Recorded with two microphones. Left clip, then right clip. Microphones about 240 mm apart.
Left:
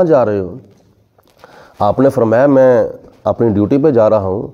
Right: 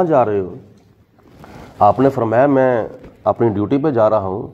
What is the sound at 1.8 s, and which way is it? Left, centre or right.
A man's voice, left.